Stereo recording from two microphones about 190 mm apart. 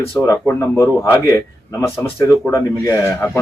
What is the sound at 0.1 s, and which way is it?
Speech, 10° left (ahead or behind).